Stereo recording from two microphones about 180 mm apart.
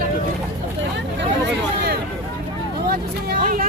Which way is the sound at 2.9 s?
55° right (ahead or behind).